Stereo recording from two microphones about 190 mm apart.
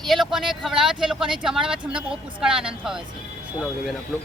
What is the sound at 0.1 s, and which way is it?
Speech, centre (ahead or behind).